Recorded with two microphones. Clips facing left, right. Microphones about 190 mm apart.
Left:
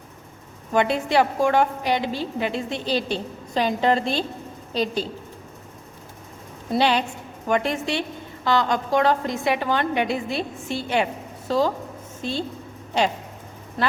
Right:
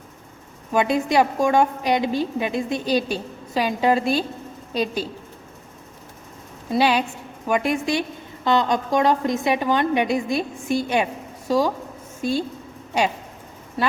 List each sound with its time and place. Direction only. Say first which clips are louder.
0.7 s a woman's voice: right 1 dB; 10° right (ahead or behind)
6.7 s a woman's voice: right 1 dB; 10° right (ahead or behind)